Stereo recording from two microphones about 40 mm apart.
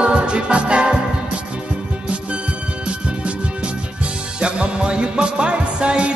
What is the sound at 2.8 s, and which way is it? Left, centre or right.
Music, right.